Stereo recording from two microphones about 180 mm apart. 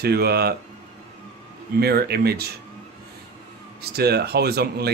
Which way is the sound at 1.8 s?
60° right (ahead or behind).